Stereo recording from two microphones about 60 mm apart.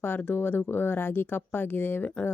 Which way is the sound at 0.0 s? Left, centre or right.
Left.